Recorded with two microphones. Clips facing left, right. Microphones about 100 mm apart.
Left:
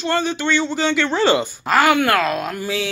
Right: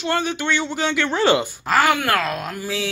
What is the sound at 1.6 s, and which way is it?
Speech, centre (ahead or behind).